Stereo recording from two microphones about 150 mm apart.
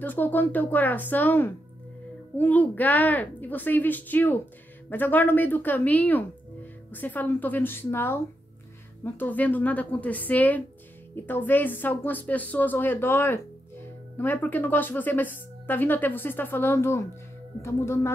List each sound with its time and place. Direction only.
0.0 s a woman's voice: 10° left (ahead or behind)